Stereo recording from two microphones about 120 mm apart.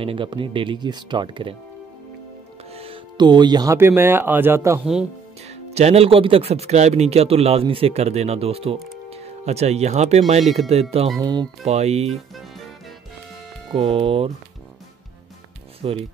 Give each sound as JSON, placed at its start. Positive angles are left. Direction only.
{"t": 0.0, "sound": "speech", "side_deg": -45}
{"t": 2.7, "sound": "music", "side_deg": -55}
{"t": 3.2, "sound": "speech", "side_deg": -35}
{"t": 3.7, "sound": "speech", "side_deg": -20}
{"t": 5.7, "sound": "speech", "side_deg": -65}
{"t": 11.1, "sound": "speech", "side_deg": -35}
{"t": 11.6, "sound": "speech", "side_deg": -60}
{"t": 13.7, "sound": "speech", "side_deg": -55}
{"t": 15.8, "sound": "speech", "side_deg": -50}